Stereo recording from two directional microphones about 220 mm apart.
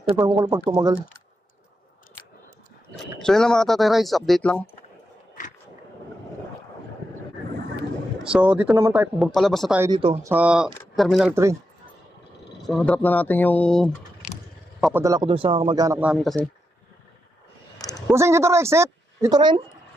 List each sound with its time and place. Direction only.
0.4 s a woman's voice: 15° right (ahead or behind)
2.9 s speech: centre (ahead or behind)
8.2 s speech: 5° right (ahead or behind)
9.9 s speech: 20° right (ahead or behind)
10.3 s speech: 5° right (ahead or behind)
12.6 s a man's voice: 5° left (ahead or behind)
15.0 s speech: 20° right (ahead or behind)
16.0 s speech: 5° right (ahead or behind)
18.1 s a woman's voice: 10° right (ahead or behind)